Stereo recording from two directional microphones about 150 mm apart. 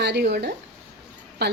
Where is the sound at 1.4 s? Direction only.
90° right.